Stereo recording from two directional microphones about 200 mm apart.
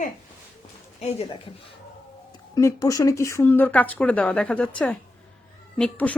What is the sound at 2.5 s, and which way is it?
A woman's voice, 15° left (ahead or behind).